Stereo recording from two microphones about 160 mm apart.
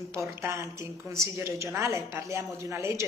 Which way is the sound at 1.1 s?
15° right (ahead or behind).